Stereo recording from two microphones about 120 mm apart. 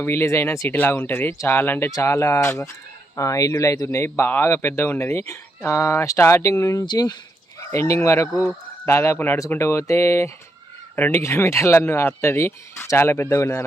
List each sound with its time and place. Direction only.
0.0 s speech: 20° left (ahead or behind); by 7.2 s 35° left (ahead or behind)
7.7 s speech: 25° left (ahead or behind)
8.3 s speech: 5° right (ahead or behind)
8.9 s speech: 25° left (ahead or behind)